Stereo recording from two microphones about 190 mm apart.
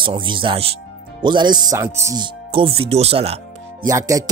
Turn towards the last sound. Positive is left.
turn(degrees=-15)  # may be behind; listen again after turning